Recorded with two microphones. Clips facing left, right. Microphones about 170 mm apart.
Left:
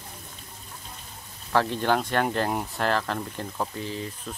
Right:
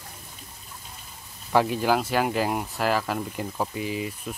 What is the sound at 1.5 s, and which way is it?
Speech, 10° right (ahead or behind).